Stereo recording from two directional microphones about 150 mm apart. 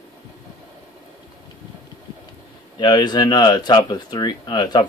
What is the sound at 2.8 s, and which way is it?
Speech, 30° left (ahead or behind).